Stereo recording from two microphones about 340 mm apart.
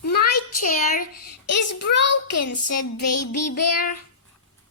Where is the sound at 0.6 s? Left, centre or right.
Left.